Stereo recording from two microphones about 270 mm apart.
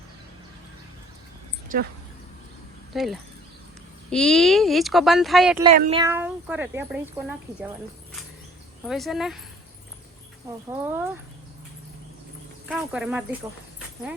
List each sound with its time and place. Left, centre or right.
1.7 s speech: right
2.9 s speech: centre
5.9 s speech: centre
8.8 s speech: centre
10.8 s speech: centre
12.6 s speech: centre